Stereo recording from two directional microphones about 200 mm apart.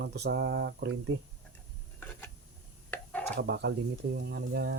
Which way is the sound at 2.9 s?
5° left (ahead or behind).